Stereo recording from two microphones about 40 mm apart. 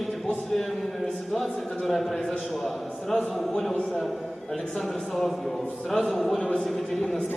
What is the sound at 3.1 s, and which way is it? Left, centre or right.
Speech, centre.